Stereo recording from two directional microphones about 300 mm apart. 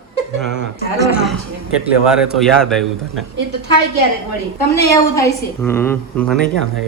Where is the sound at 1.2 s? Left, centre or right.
Centre.